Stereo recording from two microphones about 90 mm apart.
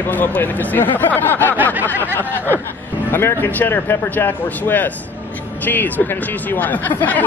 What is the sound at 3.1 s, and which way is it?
Speech, 25° left (ahead or behind).